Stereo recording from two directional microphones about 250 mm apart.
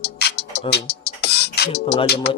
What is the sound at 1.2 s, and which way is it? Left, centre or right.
Beatboxing, left.